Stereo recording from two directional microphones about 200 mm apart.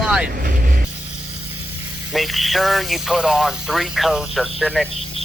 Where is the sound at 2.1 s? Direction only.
Centre (ahead or behind).